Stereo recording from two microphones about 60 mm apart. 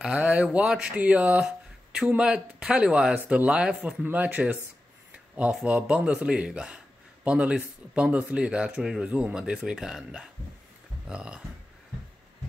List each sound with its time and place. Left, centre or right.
0.0 s speech: centre
1.4 s a sound: centre
2.0 s speech: centre
4.0 s speech: right